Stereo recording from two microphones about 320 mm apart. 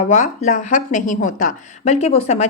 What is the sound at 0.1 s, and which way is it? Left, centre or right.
A woman's voice, left.